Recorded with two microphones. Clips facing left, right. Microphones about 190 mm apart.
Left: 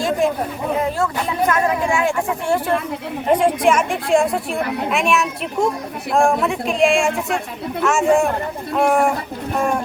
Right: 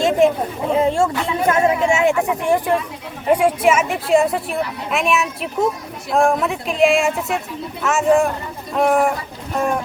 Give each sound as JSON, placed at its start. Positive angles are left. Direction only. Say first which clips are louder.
{"t": 0.7, "sound": "speech", "louder": "right 5 dB", "side_deg": -25}
{"t": 3.3, "sound": "speech", "louder": "even", "side_deg": -5}